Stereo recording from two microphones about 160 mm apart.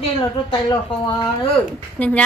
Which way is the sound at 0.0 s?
30° left (ahead or behind).